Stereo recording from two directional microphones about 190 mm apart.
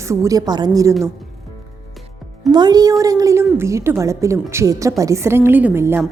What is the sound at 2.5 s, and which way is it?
A woman's voice, 20° right (ahead or behind).